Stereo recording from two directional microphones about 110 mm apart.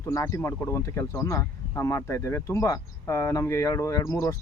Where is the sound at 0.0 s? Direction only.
30° left (ahead or behind).